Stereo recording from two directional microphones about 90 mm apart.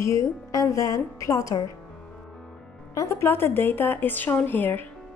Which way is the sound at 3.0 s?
35° left (ahead or behind).